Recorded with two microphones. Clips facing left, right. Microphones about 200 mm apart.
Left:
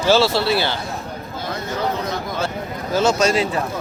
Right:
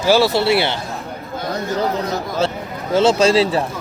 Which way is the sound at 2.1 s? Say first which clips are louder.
Right 4 dB; 30° right (ahead or behind).